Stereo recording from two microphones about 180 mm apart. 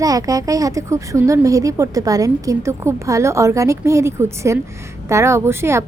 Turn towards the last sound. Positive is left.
turn(degrees=-15)  # may be behind; listen again after turning